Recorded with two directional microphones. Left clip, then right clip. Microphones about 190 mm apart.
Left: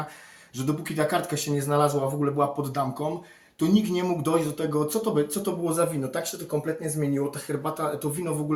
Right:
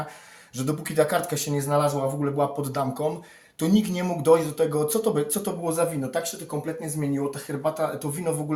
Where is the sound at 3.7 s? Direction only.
40° right (ahead or behind).